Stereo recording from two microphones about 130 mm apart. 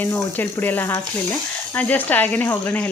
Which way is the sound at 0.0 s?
15° left (ahead or behind).